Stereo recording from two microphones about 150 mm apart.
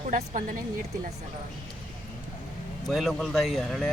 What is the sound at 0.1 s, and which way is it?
Speech, 60° right (ahead or behind).